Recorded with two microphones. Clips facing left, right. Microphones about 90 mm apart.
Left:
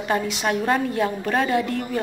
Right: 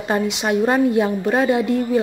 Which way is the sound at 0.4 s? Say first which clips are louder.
Right 5 dB; 20° right (ahead or behind).